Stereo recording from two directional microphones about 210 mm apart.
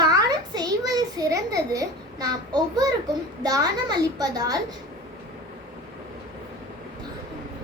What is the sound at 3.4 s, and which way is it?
A woman's voice, 20° right (ahead or behind).